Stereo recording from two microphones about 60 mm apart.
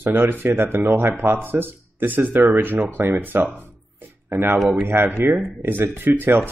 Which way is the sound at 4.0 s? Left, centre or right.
Right.